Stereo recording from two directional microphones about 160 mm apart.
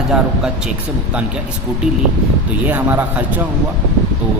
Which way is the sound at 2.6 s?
10° right (ahead or behind).